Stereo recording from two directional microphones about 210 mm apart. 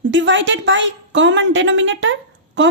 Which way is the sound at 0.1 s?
60° right (ahead or behind).